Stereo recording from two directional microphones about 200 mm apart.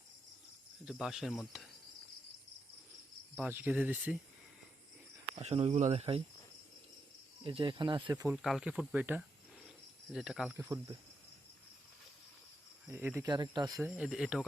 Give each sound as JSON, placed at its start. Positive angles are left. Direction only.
{"t": 0.9, "sound": "speech", "side_deg": -5}
{"t": 3.3, "sound": "speech", "side_deg": -10}
{"t": 5.3, "sound": "speech", "side_deg": -30}
{"t": 7.4, "sound": "speech", "side_deg": -25}
{"t": 8.3, "sound": "speech", "side_deg": 0}
{"t": 10.6, "sound": "speech", "side_deg": -15}
{"t": 12.9, "sound": "speech", "side_deg": -10}
{"t": 13.2, "sound": "speech", "side_deg": -20}
{"t": 13.9, "sound": "speech", "side_deg": 0}